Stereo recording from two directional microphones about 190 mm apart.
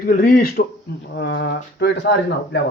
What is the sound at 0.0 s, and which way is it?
Speech, 50° left (ahead or behind).